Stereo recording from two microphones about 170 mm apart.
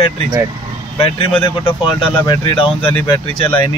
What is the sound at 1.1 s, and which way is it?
Speech, 30° left (ahead or behind).